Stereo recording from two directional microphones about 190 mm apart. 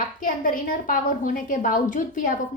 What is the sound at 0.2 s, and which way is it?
A woman's voice, 45° left (ahead or behind).